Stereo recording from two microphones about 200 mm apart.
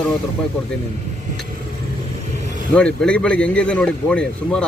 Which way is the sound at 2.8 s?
5° left (ahead or behind).